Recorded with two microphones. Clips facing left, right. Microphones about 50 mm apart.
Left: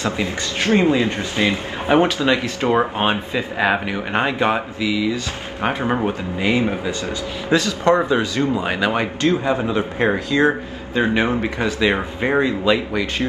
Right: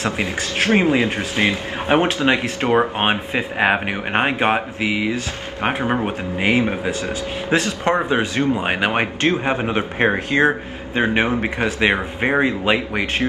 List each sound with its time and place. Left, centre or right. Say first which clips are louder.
0.0 s speech: even; right
2.0 s speech: even; right
5.6 s speech: even; right